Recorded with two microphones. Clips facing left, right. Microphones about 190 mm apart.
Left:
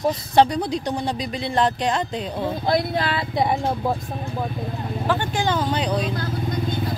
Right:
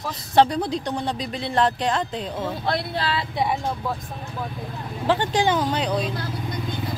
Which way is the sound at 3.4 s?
55° left (ahead or behind).